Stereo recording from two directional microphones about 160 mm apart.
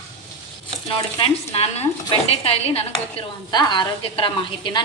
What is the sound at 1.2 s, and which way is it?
Speech, 40° left (ahead or behind).